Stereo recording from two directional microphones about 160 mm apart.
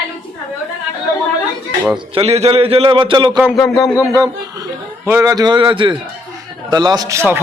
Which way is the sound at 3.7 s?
25° left (ahead or behind).